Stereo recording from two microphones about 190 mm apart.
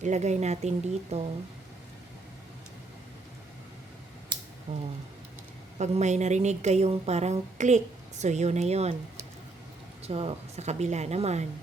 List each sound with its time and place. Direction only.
0.0 s a woman's voice: 35° right (ahead or behind)
4.7 s a woman's voice: 40° right (ahead or behind)
10.0 s a woman's voice: 30° right (ahead or behind)